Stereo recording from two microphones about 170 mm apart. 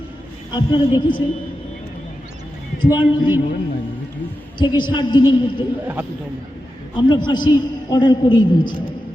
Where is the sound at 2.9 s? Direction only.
10° right (ahead or behind).